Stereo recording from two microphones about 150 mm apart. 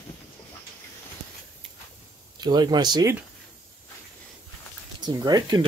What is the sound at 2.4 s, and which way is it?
Speech, 30° right (ahead or behind).